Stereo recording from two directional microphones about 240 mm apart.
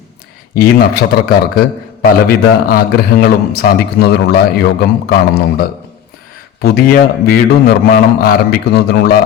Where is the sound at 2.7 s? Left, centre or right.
Left.